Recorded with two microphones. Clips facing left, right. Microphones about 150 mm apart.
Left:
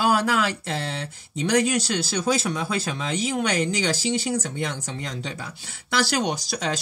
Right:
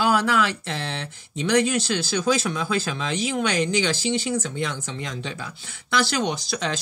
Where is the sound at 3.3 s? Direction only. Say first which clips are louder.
Right 2 dB; 40° left (ahead or behind).